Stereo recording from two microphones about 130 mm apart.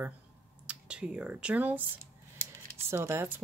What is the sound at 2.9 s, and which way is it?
Speech, 20° right (ahead or behind).